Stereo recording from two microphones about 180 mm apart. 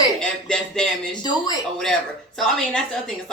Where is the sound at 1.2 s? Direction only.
25° left (ahead or behind).